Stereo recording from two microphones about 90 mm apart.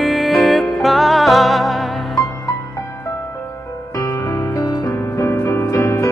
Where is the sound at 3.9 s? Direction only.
40° left (ahead or behind).